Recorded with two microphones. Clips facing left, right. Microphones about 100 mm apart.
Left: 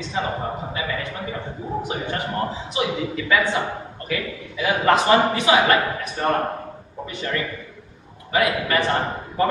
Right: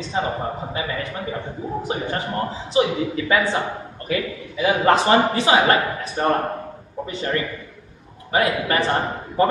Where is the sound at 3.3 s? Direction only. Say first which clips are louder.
Left 1 dB; 30° right (ahead or behind).